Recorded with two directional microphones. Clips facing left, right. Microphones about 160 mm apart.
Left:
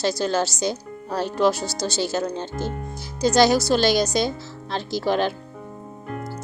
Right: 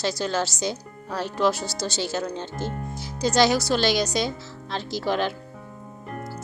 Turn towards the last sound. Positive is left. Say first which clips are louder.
# left 3 dB
turn(degrees=40)  # may be behind; listen again after turning